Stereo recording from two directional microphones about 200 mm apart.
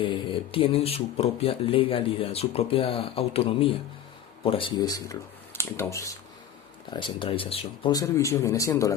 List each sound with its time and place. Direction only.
0.0 s speech: 25° left (ahead or behind)